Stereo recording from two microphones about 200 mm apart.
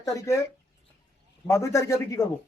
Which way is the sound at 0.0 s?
15° left (ahead or behind).